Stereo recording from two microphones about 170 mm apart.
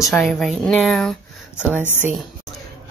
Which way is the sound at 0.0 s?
Centre (ahead or behind).